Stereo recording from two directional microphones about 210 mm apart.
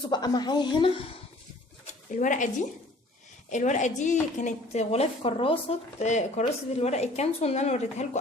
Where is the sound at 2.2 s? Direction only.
35° left (ahead or behind).